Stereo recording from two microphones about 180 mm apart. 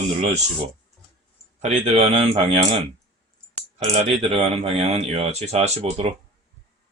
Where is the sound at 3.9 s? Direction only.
30° right (ahead or behind).